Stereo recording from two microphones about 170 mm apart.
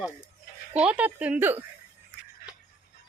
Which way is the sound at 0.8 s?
10° right (ahead or behind).